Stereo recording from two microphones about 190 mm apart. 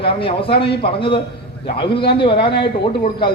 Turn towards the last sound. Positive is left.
turn(degrees=25)  # may be behind; listen again after turning